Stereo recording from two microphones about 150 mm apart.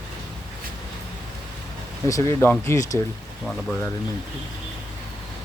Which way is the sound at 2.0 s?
20° left (ahead or behind).